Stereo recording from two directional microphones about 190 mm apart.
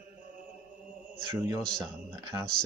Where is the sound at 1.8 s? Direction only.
20° right (ahead or behind).